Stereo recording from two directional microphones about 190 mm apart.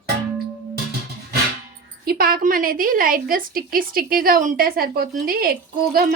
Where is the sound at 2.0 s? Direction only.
50° right (ahead or behind).